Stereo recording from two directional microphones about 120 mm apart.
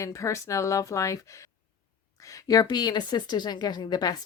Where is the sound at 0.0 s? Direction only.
25° left (ahead or behind).